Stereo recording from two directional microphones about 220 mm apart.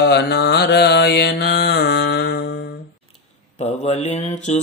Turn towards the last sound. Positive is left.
turn(degrees=30)  # may be behind; listen again after turning